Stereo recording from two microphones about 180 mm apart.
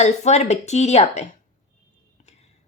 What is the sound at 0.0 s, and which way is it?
Speech, 40° left (ahead or behind).